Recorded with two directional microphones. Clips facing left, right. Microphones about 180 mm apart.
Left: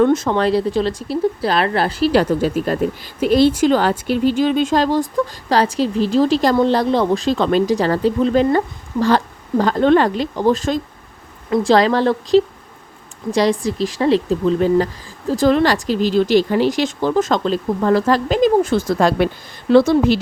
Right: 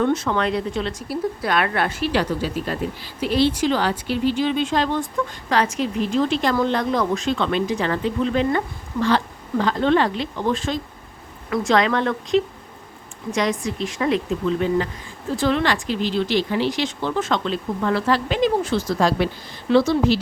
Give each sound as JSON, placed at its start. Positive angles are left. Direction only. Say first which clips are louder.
{"t": 0.0, "sound": "speech", "louder": "left 6 dB", "side_deg": 45}
{"t": 0.3, "sound": "speech", "louder": "left 6 dB", "side_deg": 35}
{"t": 2.4, "sound": "speech", "louder": "left 7 dB", "side_deg": 45}
{"t": 11.4, "sound": "speech", "louder": "left 5 dB", "side_deg": 30}